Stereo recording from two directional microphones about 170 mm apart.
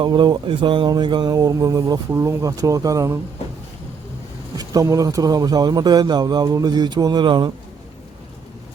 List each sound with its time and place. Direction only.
0.0 s a man's voice: 25° right (ahead or behind)
4.5 s a man's voice: 20° right (ahead or behind)